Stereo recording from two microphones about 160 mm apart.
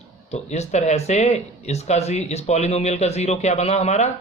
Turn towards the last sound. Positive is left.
turn(degrees=45)  # may be behind; listen again after turning